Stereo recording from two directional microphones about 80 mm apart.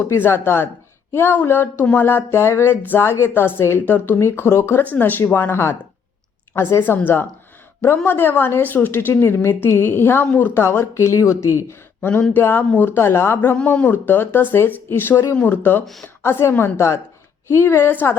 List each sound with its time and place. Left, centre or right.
0.2 s a woman's voice: left
12.3 s a woman's voice: left
13.6 s a woman's voice: centre